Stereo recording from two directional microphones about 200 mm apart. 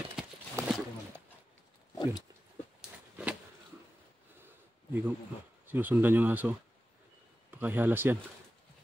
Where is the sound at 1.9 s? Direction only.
20° left (ahead or behind).